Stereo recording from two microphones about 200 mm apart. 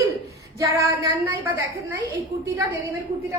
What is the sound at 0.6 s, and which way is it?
Female singing, 20° right (ahead or behind).